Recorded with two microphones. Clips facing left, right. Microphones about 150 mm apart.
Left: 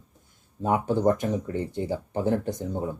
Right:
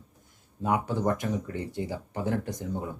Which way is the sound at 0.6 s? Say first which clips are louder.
Left 4 dB; 30° left (ahead or behind).